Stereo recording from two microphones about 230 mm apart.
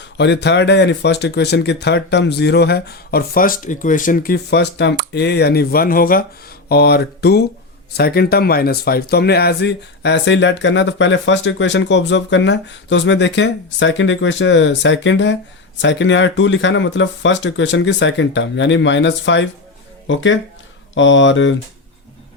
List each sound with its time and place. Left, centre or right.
0.0 s speech: left